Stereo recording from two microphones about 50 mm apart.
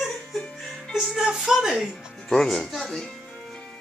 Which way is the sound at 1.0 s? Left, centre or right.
Centre.